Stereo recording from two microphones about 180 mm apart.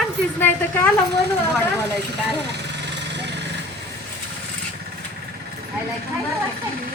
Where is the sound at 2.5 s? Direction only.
75° right (ahead or behind).